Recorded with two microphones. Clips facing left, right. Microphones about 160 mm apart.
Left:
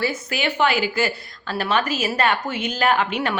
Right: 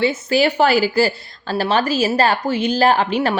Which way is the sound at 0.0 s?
30° right (ahead or behind).